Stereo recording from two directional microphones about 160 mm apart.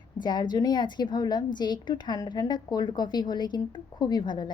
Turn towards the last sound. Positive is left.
turn(degrees=30)  # may be behind; listen again after turning